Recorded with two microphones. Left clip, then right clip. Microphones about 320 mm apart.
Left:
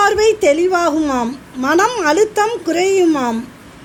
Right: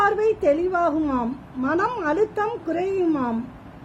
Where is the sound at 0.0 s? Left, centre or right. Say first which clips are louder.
Left 7 dB; left.